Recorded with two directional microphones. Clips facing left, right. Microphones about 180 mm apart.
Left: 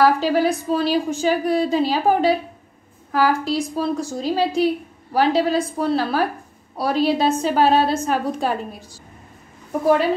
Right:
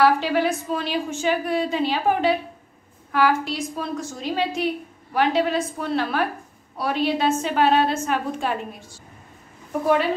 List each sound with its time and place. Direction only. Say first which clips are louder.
0.0 s a woman's voice: left 2 dB; 40° left (ahead or behind)